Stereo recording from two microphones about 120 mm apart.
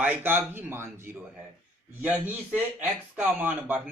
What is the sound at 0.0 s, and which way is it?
A man's voice, 15° right (ahead or behind).